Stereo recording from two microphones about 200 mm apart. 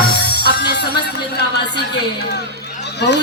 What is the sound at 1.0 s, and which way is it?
A man's voice, 55° left (ahead or behind).